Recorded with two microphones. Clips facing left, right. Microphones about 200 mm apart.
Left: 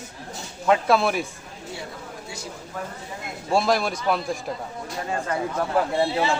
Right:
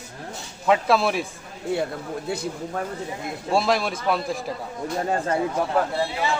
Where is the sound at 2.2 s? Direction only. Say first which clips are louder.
Right 9 dB; 60° right (ahead or behind).